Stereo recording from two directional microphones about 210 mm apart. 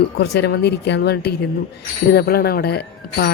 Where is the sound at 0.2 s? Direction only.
55° left (ahead or behind).